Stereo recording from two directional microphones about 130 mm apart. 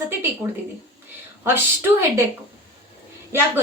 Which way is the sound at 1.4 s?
15° right (ahead or behind).